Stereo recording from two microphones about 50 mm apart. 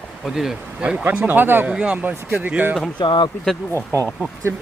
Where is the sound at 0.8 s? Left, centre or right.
Centre.